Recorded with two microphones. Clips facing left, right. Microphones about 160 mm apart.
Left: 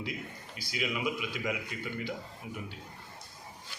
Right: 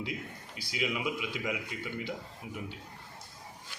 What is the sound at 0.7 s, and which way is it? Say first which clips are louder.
Speech: even; 20° right (ahead or behind).